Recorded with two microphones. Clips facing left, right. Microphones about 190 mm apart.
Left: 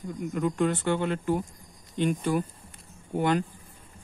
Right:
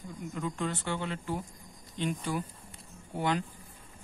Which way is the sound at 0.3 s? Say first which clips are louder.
Left 8 dB; 55° left (ahead or behind).